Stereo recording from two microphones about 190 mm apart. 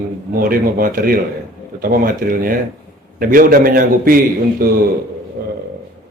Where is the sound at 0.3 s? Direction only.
50° right (ahead or behind).